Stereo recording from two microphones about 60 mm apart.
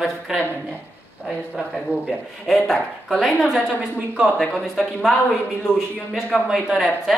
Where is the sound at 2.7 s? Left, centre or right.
Centre.